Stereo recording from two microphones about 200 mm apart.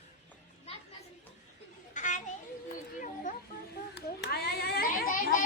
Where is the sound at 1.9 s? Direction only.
40° left (ahead or behind).